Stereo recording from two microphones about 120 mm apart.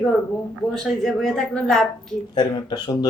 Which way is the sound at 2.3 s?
35° left (ahead or behind).